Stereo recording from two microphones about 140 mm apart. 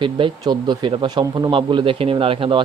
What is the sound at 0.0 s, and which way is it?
Speech, 35° right (ahead or behind).